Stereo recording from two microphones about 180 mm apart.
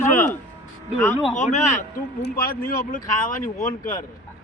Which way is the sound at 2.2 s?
55° left (ahead or behind).